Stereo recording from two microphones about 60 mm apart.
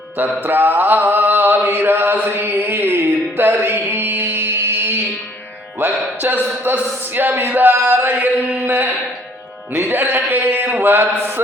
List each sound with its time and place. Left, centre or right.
0.4 s mantra: right
2.2 s music: right
5.8 s speech: right
6.7 s mantra: right